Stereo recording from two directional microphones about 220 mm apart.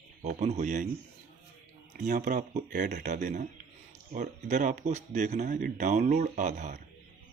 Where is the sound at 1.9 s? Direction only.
40° right (ahead or behind).